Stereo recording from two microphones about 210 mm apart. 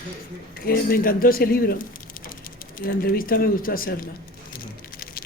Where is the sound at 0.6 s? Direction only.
45° left (ahead or behind).